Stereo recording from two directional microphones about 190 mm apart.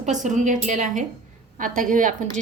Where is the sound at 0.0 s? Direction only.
40° right (ahead or behind).